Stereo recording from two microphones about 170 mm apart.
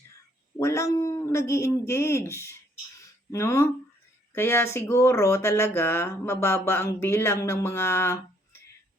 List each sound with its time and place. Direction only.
0.6 s speech: 15° left (ahead or behind)